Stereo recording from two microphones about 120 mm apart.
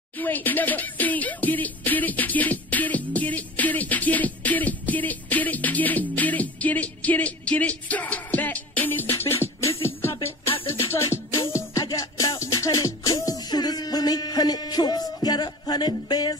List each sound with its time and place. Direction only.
0.2 s music: 15° left (ahead or behind)
10.4 s music: 50° left (ahead or behind)
10.7 s music: 20° left (ahead or behind)